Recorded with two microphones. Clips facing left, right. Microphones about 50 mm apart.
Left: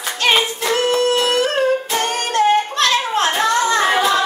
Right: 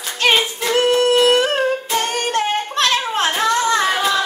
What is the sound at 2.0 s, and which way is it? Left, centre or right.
Humming, left.